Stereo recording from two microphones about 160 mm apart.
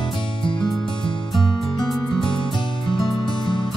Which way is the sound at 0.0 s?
30° left (ahead or behind).